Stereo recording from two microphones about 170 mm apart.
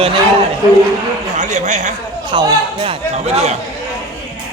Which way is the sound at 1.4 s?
45° right (ahead or behind).